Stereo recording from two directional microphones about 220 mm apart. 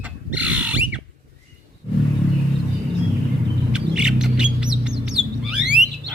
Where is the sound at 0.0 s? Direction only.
5° right (ahead or behind).